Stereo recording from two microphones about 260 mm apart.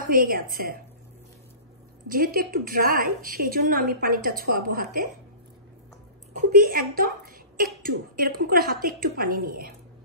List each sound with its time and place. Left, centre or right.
0.0 s a woman's voice: right
2.0 s a woman's voice: right
6.5 s a woman's voice: right